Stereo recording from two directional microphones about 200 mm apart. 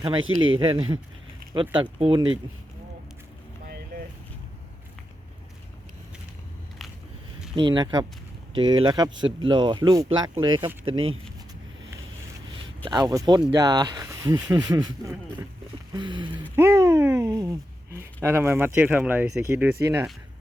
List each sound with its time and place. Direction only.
0.2 s speech: 90° right
0.6 s speech: 25° right (ahead or behind)
7.5 s speech: 25° right (ahead or behind)
10.9 s speech: 90° right
12.8 s speech: 20° right (ahead or behind)